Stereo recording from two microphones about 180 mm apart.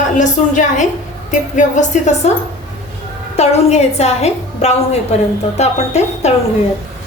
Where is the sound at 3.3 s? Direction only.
35° left (ahead or behind).